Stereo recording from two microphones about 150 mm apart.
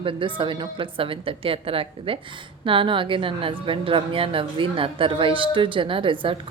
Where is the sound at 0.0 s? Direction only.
35° right (ahead or behind).